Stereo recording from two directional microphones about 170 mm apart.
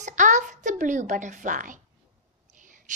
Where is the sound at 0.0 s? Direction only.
45° right (ahead or behind).